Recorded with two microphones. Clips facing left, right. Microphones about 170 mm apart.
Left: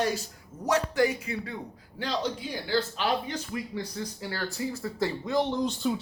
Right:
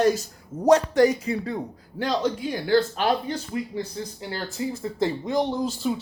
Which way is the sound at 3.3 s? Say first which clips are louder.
Right 4 dB; 30° right (ahead or behind).